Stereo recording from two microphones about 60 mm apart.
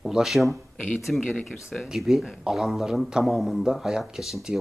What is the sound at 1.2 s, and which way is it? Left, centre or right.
Speech, left.